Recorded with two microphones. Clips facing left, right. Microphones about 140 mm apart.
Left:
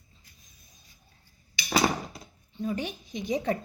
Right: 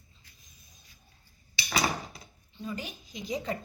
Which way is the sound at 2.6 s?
50° left (ahead or behind).